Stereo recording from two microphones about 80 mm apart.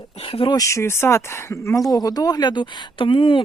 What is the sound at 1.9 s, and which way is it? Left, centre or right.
Speech, left.